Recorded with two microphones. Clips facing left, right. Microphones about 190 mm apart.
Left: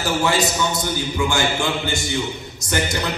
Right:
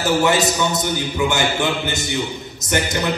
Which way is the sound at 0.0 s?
20° right (ahead or behind).